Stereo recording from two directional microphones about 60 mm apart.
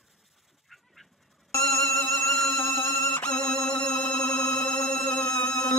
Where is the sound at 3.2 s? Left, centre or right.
Centre.